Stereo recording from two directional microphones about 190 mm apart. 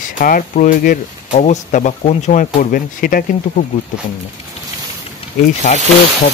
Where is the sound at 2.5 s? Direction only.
50° left (ahead or behind).